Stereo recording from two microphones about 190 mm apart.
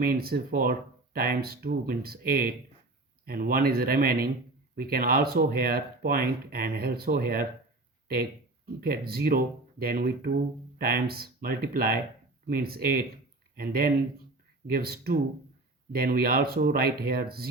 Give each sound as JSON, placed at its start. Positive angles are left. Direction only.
{"t": 0.0, "sound": "speech", "side_deg": -50}